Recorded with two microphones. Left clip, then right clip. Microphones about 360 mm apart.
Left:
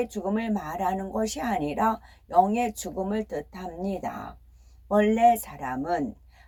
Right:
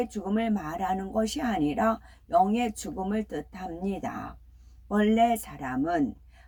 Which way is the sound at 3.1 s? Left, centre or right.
Centre.